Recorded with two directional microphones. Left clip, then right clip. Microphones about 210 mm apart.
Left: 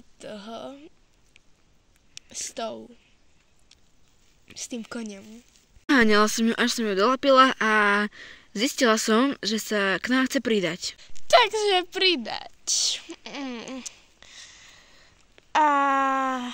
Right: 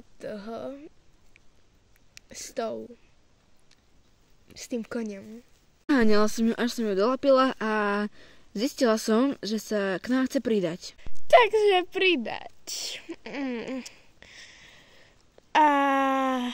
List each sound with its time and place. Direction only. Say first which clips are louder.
0.2 s speech: right 2 dB; 55° right (ahead or behind)
2.1 s speech: even; 55° right (ahead or behind)
4.6 s speech: right 2 dB; 50° right (ahead or behind)
5.9 s speech: left 4 dB; 5° left (ahead or behind)
11.2 s speech: right 1 dB; 45° right (ahead or behind)